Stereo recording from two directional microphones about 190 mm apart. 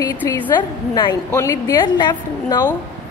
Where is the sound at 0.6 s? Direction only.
25° left (ahead or behind).